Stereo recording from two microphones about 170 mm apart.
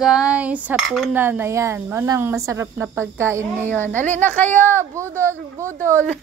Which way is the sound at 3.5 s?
10° left (ahead or behind).